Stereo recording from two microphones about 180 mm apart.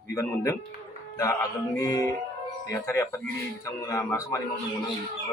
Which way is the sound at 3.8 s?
15° left (ahead or behind).